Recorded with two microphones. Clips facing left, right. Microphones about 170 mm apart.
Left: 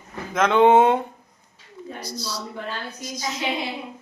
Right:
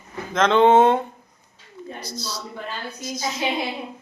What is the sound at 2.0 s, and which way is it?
Speech, 10° left (ahead or behind).